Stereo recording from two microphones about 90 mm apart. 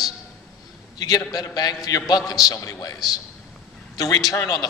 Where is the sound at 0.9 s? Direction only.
45° left (ahead or behind).